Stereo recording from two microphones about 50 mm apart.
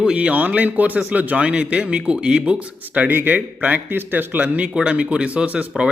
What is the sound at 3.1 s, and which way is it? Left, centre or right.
Speech, right.